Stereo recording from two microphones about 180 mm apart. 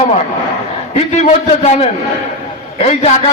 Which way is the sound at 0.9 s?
35° left (ahead or behind).